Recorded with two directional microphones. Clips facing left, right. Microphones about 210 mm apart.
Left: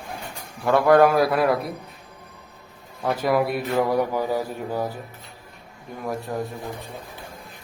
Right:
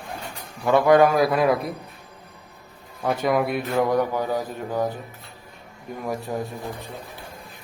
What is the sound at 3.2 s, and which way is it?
Speech, 5° left (ahead or behind).